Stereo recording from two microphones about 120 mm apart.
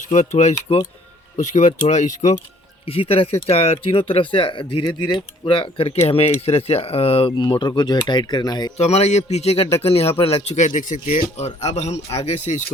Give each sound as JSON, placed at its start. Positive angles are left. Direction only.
{"t": 0.0, "sound": "speech", "side_deg": 80}
{"t": 1.4, "sound": "speech", "side_deg": 90}
{"t": 2.8, "sound": "speech", "side_deg": 50}
{"t": 8.8, "sound": "speech", "side_deg": 65}